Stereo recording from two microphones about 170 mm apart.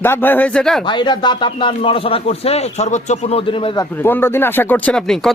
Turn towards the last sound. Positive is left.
turn(degrees=5)  # may be behind; listen again after turning